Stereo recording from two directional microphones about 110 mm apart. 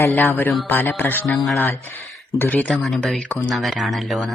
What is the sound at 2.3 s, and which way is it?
Speech, 15° left (ahead or behind).